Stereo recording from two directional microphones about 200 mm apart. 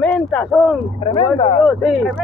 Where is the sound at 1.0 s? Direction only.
25° left (ahead or behind).